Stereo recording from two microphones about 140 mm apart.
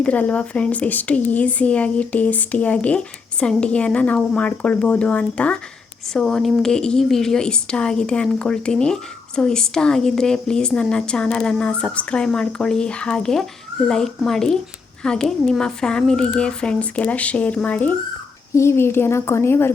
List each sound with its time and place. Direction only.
0.0 s a woman's voice: 10° left (ahead or behind)